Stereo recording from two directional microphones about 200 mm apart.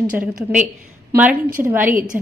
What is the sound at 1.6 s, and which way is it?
Speech, 10° right (ahead or behind).